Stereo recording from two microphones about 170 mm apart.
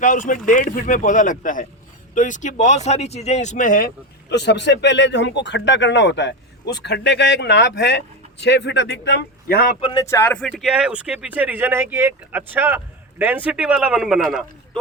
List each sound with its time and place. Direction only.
0.0 s speech: 50° left (ahead or behind)
9.8 s speech: 20° left (ahead or behind); by 14.8 s centre (ahead or behind)